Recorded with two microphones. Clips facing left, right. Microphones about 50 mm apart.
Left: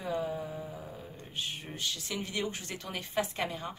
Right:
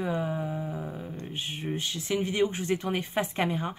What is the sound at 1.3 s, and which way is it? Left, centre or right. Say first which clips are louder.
Speech: right 5 dB; right.